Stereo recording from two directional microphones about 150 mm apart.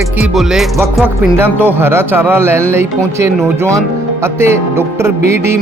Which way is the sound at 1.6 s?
15° right (ahead or behind).